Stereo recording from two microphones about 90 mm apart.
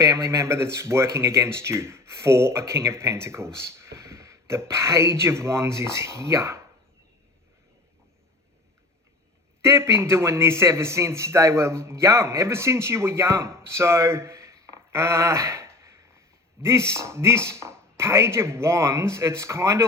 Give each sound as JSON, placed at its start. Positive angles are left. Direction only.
{"t": 0.0, "sound": "speech", "side_deg": -35}
{"t": 9.6, "sound": "a man's voice", "side_deg": -30}